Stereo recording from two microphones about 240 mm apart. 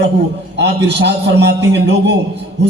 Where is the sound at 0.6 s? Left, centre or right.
Right.